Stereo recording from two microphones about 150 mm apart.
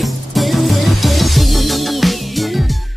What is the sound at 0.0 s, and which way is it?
Music, centre (ahead or behind).